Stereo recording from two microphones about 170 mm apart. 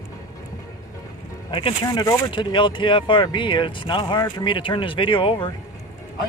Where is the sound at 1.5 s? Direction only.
25° left (ahead or behind).